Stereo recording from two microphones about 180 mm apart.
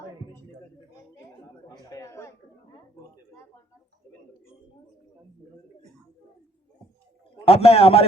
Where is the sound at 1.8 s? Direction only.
20° left (ahead or behind).